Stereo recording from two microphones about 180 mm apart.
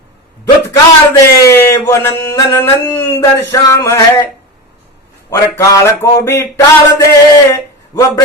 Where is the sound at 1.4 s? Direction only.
15° left (ahead or behind).